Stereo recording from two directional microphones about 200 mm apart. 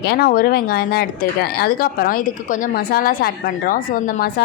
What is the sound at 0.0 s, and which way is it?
A woman's voice, 50° left (ahead or behind).